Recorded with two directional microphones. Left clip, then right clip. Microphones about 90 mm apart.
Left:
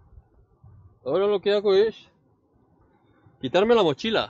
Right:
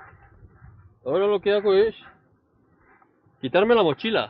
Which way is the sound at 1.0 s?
50° left (ahead or behind).